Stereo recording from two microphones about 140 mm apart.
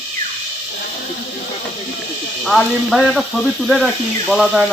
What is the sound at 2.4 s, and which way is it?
Speech, centre (ahead or behind).